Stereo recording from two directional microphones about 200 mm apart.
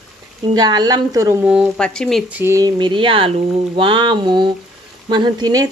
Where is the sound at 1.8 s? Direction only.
5° left (ahead or behind).